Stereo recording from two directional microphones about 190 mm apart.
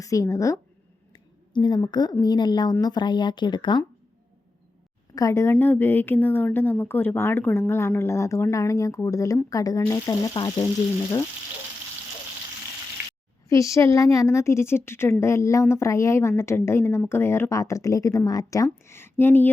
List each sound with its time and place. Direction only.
0.0 s a woman's voice: 15° left (ahead or behind)
5.1 s a woman's voice: 15° left (ahead or behind)
13.5 s a woman's voice: 15° left (ahead or behind)